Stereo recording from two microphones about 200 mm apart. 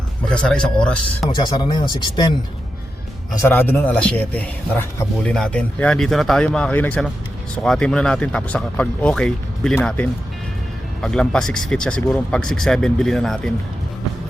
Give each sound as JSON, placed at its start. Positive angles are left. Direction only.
{"t": 0.3, "sound": "a man's voice", "side_deg": 5}
{"t": 1.4, "sound": "speech", "side_deg": 20}
{"t": 3.4, "sound": "a man's voice", "side_deg": 10}